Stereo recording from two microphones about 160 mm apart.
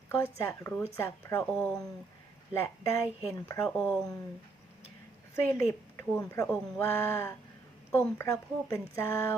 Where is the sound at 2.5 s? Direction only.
15° left (ahead or behind).